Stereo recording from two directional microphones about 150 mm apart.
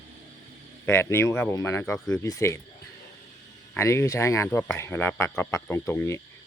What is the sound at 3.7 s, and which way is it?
Speech, 20° left (ahead or behind).